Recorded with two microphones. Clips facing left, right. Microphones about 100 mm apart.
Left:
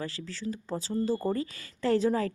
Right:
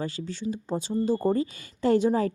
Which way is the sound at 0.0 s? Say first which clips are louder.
Right 4 dB; 25° right (ahead or behind).